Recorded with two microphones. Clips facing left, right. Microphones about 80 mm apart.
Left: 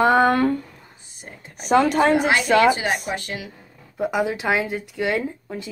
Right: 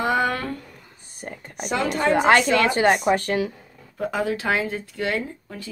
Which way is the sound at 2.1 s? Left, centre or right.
Right.